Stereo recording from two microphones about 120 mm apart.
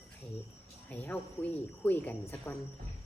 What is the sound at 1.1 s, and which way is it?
A woman's voice, 15° left (ahead or behind).